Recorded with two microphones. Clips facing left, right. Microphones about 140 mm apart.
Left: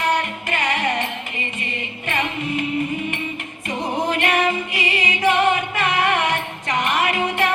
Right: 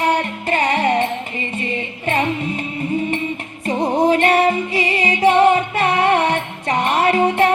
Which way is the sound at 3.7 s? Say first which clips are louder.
Right 7 dB; 30° right (ahead or behind).